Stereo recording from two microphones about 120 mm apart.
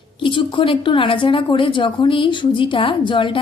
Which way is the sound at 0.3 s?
45° left (ahead or behind).